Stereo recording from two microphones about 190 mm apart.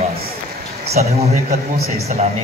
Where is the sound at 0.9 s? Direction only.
35° right (ahead or behind).